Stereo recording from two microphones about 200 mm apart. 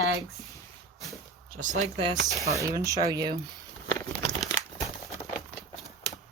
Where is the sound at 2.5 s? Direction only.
15° right (ahead or behind).